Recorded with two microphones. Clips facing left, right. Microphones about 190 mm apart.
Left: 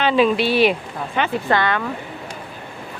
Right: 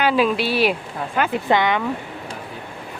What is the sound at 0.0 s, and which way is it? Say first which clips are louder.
Speech: left 2 dB; 5° right (ahead or behind).